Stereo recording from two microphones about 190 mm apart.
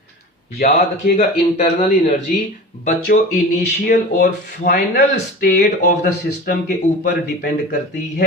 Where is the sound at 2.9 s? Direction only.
55° left (ahead or behind).